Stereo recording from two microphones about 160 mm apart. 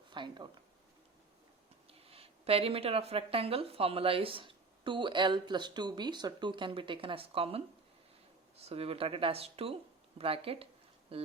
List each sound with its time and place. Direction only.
0.1 s speech: 30° right (ahead or behind)
1.9 s speech: 40° right (ahead or behind)